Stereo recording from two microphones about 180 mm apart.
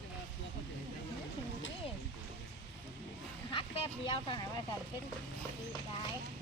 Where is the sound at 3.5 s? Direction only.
30° left (ahead or behind).